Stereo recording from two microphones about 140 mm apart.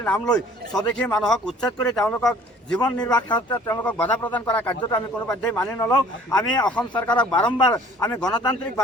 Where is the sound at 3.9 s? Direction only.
10° left (ahead or behind).